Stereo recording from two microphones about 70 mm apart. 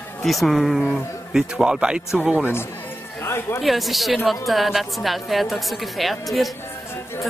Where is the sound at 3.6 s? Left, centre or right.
Centre.